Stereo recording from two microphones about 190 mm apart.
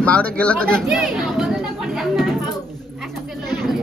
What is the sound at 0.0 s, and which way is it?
Chatter, 5° left (ahead or behind).